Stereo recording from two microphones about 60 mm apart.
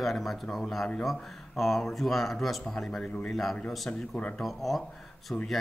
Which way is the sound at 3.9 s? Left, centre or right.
Centre.